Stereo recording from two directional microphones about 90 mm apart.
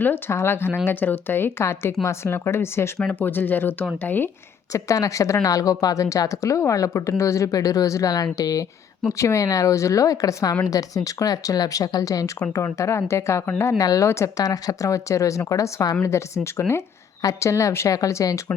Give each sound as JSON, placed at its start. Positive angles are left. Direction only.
{"t": 0.0, "sound": "speech", "side_deg": 25}
{"t": 4.7, "sound": "a woman's voice", "side_deg": 35}